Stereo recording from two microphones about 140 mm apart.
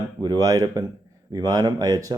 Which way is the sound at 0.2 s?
25° right (ahead or behind).